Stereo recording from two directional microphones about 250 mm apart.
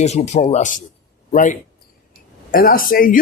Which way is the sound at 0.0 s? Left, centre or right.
Left.